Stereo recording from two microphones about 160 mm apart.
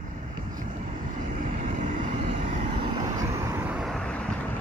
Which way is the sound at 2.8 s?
25° right (ahead or behind).